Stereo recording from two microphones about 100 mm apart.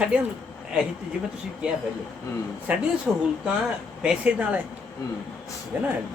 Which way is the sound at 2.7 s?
15° right (ahead or behind).